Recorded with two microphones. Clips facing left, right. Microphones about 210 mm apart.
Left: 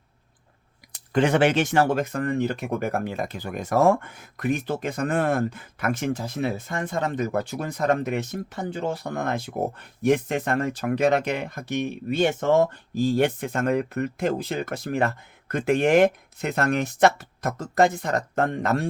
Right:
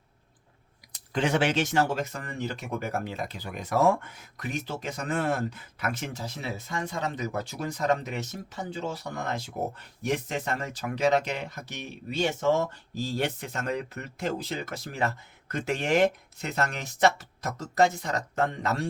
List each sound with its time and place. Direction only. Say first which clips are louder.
0.9 s speech: left 6 dB; 55° left (ahead or behind)